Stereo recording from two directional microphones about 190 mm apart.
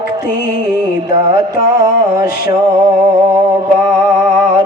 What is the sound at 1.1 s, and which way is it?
Music, 25° right (ahead or behind).